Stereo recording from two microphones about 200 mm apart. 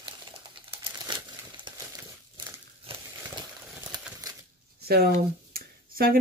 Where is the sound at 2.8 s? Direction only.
30° right (ahead or behind).